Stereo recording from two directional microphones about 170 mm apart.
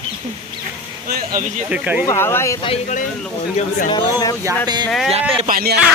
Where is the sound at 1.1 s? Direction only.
55° right (ahead or behind).